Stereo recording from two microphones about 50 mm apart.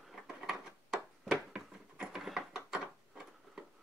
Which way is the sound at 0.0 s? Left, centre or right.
Centre.